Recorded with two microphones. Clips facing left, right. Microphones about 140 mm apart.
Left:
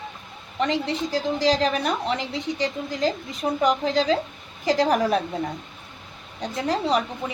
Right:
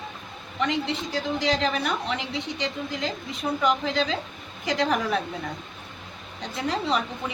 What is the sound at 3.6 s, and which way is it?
A woman's voice, 35° left (ahead or behind).